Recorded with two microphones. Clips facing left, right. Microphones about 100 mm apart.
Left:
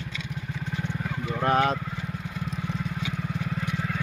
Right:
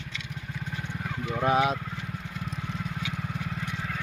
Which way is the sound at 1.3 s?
5° right (ahead or behind).